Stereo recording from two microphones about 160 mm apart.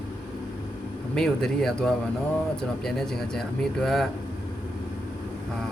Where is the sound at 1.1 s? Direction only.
5° left (ahead or behind).